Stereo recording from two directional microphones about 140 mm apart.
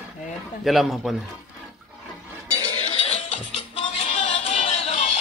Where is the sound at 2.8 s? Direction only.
45° left (ahead or behind).